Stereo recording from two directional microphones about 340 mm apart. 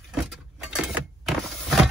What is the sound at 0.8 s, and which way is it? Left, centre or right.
Power windows, centre.